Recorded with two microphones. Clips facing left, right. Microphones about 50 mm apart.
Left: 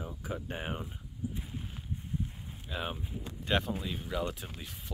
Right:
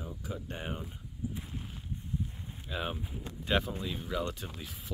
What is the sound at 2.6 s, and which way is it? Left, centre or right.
Speech, centre.